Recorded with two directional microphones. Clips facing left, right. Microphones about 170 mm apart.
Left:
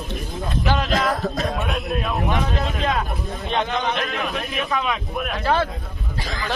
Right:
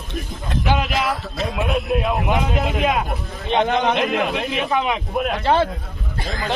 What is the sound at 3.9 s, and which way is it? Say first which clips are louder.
A man's voice: right 5 dB; 20° right (ahead or behind).